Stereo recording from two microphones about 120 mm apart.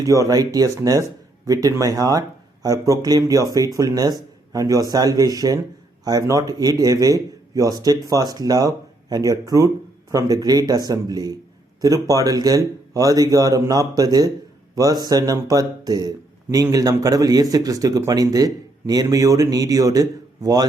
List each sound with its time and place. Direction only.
0.0 s a man's voice: 30° right (ahead or behind)